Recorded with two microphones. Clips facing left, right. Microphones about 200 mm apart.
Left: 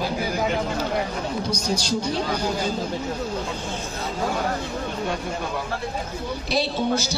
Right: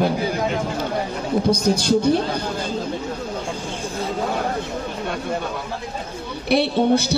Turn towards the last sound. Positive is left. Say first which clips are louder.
# right 6 dB
turn(degrees=-60)  # may be behind; listen again after turning